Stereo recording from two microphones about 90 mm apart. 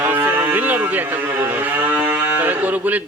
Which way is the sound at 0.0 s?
25° right (ahead or behind).